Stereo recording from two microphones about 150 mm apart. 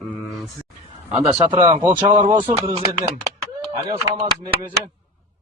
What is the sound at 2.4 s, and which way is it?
Speech, 35° right (ahead or behind).